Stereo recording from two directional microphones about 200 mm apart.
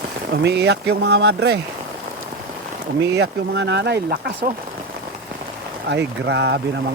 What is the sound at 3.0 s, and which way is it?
Speech, 60° right (ahead or behind).